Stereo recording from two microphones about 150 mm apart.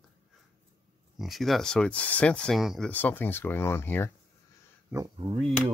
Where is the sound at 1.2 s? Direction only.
Centre (ahead or behind).